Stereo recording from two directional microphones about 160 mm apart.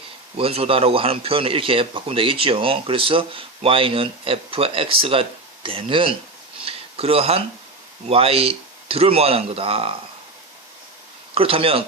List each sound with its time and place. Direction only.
0.3 s a man's voice: 35° right (ahead or behind)
11.3 s a man's voice: 35° right (ahead or behind)